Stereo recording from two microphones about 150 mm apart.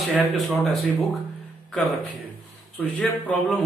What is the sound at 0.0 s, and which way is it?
Speech, centre (ahead or behind).